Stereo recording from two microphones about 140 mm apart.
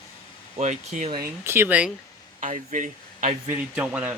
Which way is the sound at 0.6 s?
55° right (ahead or behind).